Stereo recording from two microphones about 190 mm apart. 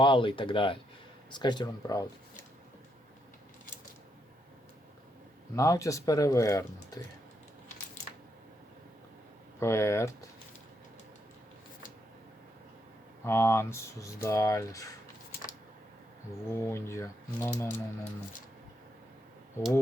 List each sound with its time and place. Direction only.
0.0 s speech: 25° left (ahead or behind)
5.5 s speech: 15° left (ahead or behind)
9.6 s speech: 15° left (ahead or behind)
13.2 s speech: 10° left (ahead or behind)
16.5 s speech: 15° left (ahead or behind)